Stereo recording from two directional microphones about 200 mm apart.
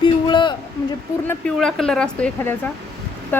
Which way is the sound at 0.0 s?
25° left (ahead or behind).